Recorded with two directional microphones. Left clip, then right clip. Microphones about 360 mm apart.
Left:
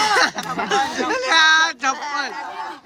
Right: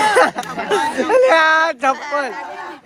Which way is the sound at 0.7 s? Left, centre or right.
Centre.